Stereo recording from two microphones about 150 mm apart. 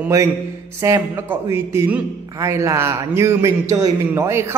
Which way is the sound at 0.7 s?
20° right (ahead or behind).